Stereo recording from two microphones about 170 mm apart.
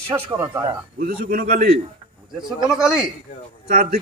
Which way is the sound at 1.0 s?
65° right (ahead or behind).